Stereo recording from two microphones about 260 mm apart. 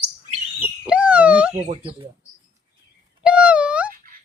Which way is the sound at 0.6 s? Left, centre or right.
Centre.